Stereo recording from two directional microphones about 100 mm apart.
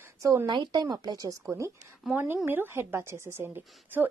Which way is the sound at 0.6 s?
45° right (ahead or behind).